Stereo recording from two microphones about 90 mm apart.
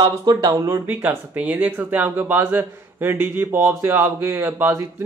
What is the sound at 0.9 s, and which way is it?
Speech, 20° right (ahead or behind).